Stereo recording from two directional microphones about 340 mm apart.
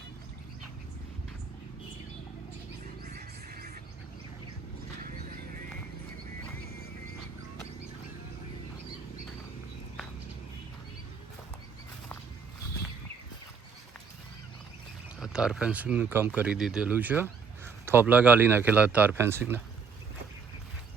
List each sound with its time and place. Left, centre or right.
3.1 s music: right
15.2 s speech: centre